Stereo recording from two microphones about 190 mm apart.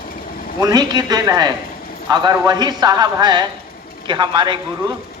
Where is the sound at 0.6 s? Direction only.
20° right (ahead or behind).